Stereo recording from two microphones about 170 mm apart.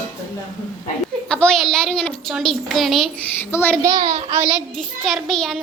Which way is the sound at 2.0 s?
5° left (ahead or behind).